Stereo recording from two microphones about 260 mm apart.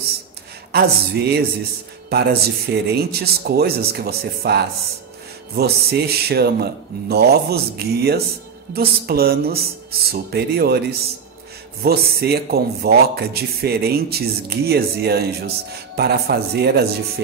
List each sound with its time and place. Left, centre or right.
0.7 s a man's voice: right